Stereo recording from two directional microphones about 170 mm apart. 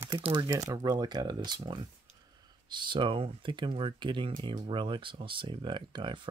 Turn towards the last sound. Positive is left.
turn(degrees=-25)  # may be behind; listen again after turning